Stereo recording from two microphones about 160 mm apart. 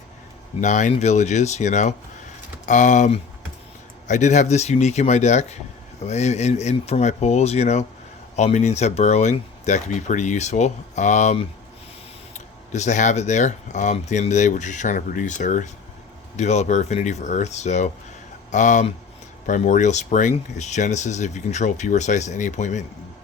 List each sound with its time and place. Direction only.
0.6 s speech: 50° left (ahead or behind)
12.7 s speech: 45° left (ahead or behind)